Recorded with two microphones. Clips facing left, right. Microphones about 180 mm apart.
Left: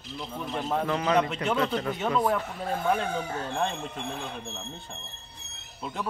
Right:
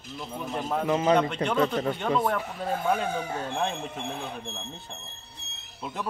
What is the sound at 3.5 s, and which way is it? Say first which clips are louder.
Speech: left 1 dB; 5° right (ahead or behind).